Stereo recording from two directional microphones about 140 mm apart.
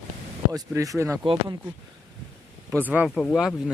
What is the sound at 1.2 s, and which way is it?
Speech, 35° right (ahead or behind).